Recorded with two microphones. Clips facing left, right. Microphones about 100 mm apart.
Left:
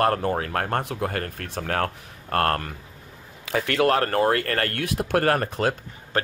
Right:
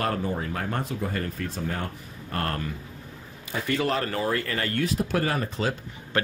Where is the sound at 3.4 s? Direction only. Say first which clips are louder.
Left 5 dB; 85° left; by 5.7 s 55° left (ahead or behind).